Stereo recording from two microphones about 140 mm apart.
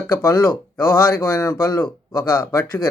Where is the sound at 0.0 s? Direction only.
15° left (ahead or behind).